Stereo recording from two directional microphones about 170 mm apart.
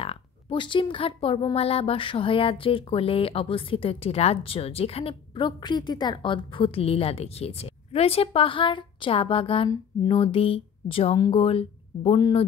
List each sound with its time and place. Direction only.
0.0 s speech: 35° left (ahead or behind)